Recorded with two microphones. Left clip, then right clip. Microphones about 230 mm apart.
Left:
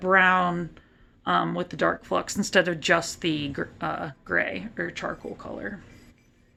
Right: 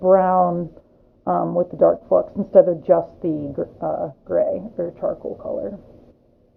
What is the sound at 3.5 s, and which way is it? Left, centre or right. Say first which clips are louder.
Speech: right 6 dB; left.